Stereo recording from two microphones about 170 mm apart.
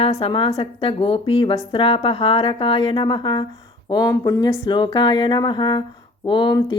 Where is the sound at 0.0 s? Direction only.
35° left (ahead or behind).